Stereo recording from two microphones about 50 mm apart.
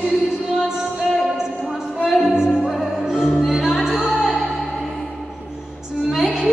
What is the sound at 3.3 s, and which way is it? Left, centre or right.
Music, centre.